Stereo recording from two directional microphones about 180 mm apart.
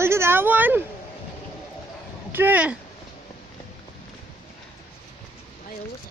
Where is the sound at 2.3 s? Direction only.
10° right (ahead or behind).